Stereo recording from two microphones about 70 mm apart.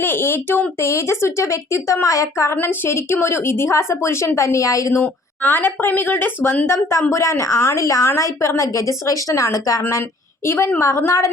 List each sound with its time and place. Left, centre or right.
0.0 s a woman's voice: left
5.0 s speech: left
7.1 s a woman's voice: left
10.4 s a woman's voice: left